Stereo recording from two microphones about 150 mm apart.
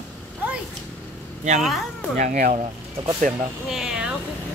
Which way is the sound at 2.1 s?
60° right (ahead or behind).